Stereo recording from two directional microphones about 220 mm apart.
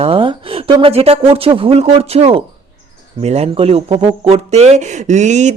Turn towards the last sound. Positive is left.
turn(degrees=-30)  # may be behind; listen again after turning